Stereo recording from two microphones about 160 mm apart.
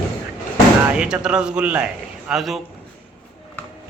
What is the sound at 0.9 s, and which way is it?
A man's voice, 5° right (ahead or behind).